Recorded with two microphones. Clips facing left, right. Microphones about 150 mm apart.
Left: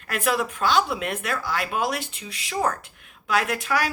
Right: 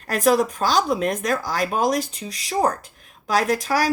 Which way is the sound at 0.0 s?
40° right (ahead or behind).